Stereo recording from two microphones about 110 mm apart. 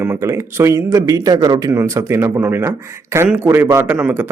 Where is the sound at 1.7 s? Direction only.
25° right (ahead or behind).